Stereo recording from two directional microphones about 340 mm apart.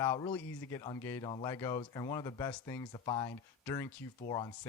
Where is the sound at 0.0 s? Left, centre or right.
Centre.